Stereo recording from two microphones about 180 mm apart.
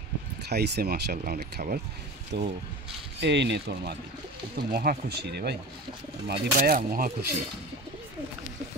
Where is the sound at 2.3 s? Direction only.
70° right (ahead or behind); by 7.1 s 50° right (ahead or behind).